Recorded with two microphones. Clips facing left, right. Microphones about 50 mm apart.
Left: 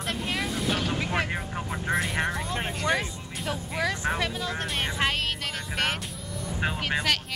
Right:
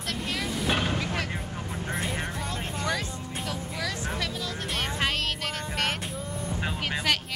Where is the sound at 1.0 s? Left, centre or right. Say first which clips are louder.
Left 3 dB; left.